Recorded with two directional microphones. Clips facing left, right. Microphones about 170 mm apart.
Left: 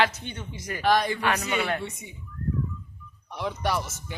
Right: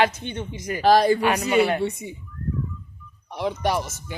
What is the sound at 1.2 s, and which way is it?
Speech, 15° right (ahead or behind).